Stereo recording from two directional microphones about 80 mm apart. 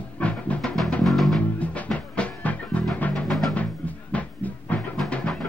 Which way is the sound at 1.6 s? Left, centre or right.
Centre.